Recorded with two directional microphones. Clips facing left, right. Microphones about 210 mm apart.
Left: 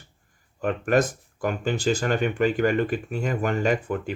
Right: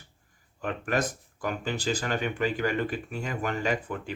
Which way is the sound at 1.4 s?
50° left (ahead or behind).